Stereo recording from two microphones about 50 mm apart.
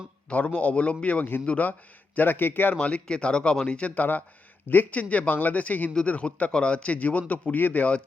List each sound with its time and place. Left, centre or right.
0.3 s a man's voice: left
2.7 s a man's voice: left